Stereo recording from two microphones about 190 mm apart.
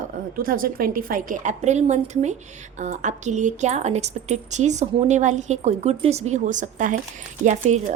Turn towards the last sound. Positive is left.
turn(degrees=-40)  # may be behind; listen again after turning